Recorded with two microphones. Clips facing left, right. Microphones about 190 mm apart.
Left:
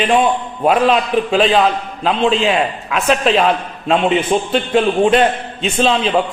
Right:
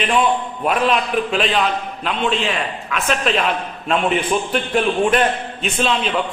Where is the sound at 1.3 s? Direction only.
35° left (ahead or behind).